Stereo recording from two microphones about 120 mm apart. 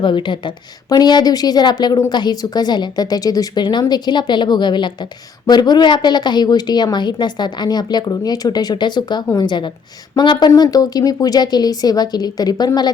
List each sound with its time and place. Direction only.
0.0 s a woman's voice: 40° left (ahead or behind)